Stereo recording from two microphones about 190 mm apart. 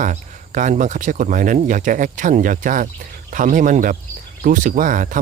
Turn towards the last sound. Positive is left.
turn(degrees=-45)  # may be behind; listen again after turning